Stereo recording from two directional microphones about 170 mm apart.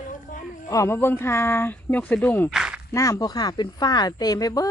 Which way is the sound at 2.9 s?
20° left (ahead or behind).